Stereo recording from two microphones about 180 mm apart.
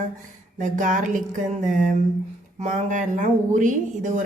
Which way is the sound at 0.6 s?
45° right (ahead or behind).